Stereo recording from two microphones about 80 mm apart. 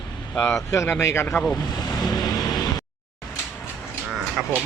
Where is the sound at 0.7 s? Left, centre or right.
Left.